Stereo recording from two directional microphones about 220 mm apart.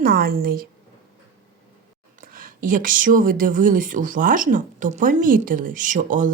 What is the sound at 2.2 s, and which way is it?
Speech, 40° right (ahead or behind).